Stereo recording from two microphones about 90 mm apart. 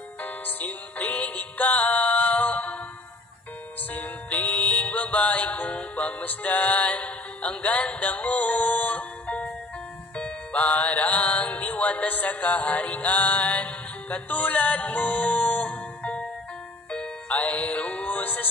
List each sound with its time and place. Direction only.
0.2 s music: 20° left (ahead or behind)
3.9 s music: 20° left (ahead or behind)